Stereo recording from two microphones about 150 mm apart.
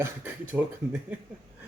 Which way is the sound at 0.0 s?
15° right (ahead or behind).